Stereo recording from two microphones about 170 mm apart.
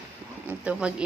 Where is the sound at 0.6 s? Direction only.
5° right (ahead or behind).